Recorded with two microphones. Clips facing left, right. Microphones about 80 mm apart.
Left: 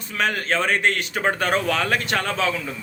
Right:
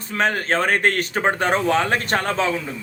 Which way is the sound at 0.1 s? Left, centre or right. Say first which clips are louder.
Right 2 dB; right.